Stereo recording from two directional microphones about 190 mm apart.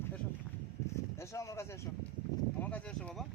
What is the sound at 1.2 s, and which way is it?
Speech, 15° left (ahead or behind).